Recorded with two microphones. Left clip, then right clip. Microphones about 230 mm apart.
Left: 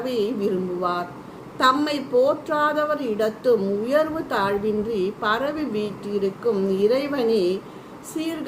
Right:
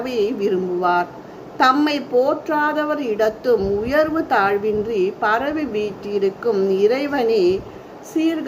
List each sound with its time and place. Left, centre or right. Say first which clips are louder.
0.0 s a woman's voice: right 3 dB; centre